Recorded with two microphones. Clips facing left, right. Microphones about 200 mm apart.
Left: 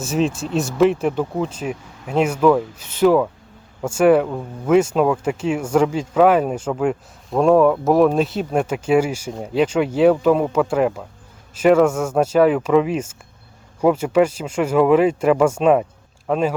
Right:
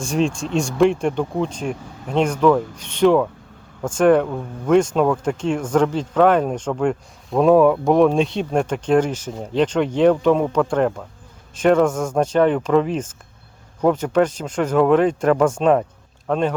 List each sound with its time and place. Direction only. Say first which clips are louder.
0.0 s speech: even; 5° left (ahead or behind)